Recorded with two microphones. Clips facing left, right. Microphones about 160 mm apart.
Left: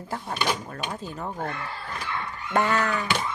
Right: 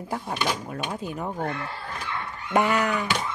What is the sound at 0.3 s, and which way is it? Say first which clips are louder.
Speech: left 1 dB; 10° right (ahead or behind).